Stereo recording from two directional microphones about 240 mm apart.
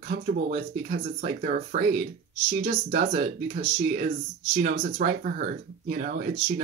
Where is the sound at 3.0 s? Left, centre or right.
Right.